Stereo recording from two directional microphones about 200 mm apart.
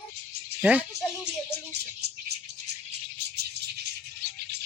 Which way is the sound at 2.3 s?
55° right (ahead or behind).